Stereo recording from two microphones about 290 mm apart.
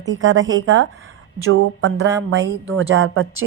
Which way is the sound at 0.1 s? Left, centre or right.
Right.